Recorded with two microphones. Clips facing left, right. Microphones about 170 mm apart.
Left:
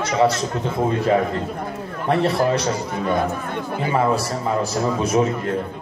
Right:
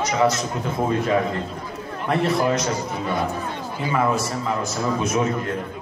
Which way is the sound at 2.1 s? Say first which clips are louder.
Left 2 dB; 30° left (ahead or behind).